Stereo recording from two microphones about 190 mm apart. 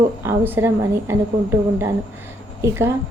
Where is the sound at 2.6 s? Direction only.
15° right (ahead or behind).